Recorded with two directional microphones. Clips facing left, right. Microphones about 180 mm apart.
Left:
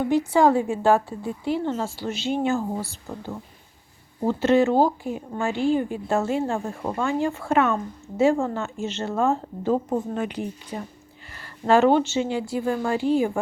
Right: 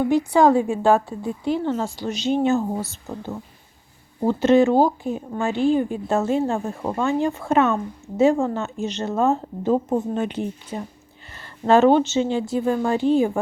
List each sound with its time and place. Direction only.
0.1 s a woman's voice: 15° right (ahead or behind)